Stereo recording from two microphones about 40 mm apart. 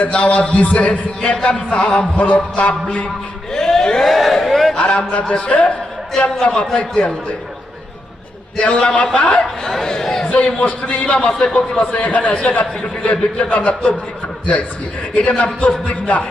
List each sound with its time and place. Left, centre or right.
0.0 s a man's voice: left
3.5 s a sound: centre
4.0 s a sound: centre
4.8 s a sound: left
5.5 s a man's voice: left
8.6 s a man's voice: left
9.4 s speech: centre
10.2 s a man's voice: left
15.1 s a man's voice: left